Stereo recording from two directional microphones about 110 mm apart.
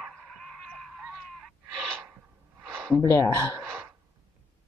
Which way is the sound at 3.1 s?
25° left (ahead or behind).